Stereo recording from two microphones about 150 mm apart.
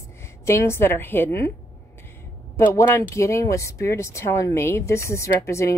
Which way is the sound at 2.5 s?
15° left (ahead or behind).